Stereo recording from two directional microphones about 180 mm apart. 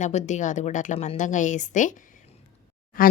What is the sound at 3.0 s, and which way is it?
Speech, 50° left (ahead or behind).